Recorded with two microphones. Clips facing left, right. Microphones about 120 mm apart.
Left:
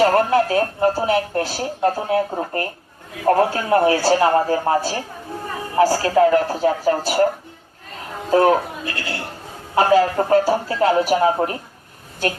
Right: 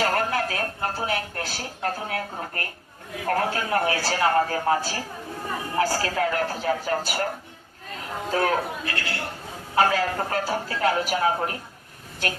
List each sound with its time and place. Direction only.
0.0 s speech: 30° left (ahead or behind)
8.3 s speech: 30° left (ahead or behind)